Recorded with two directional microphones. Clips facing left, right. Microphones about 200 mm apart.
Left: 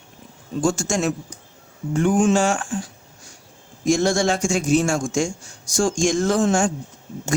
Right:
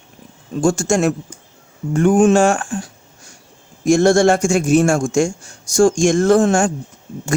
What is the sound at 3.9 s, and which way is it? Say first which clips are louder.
Speech: right 7 dB; 55° right (ahead or behind).